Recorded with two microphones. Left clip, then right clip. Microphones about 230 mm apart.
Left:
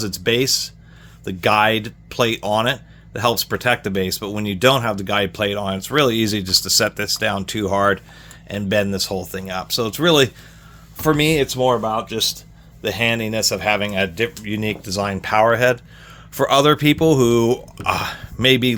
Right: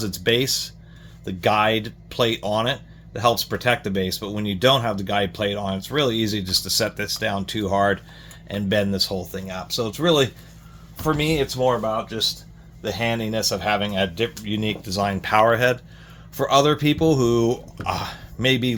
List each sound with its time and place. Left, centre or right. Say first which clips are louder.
0.0 s speech: left 2 dB; left
12.8 s speech: left 5 dB; left
16.3 s speech: left 3 dB; left